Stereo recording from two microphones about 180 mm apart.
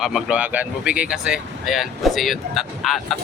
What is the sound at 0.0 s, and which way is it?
Speech, 5° right (ahead or behind).